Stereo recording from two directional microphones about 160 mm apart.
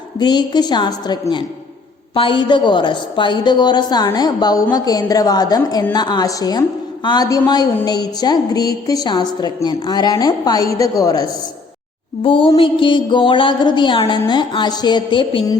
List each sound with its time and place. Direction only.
0.2 s a woman's voice: 25° left (ahead or behind)
12.2 s music: 30° left (ahead or behind)